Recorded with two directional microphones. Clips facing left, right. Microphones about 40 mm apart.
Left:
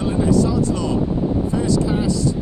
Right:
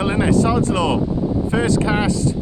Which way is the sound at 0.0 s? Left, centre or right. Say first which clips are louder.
Right 1 dB; right.